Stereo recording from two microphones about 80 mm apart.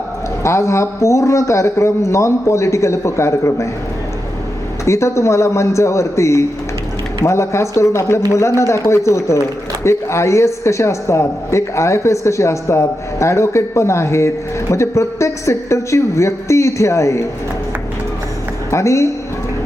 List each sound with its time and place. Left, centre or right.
0.4 s a man's voice: left
4.9 s a man's voice: left
18.7 s a man's voice: left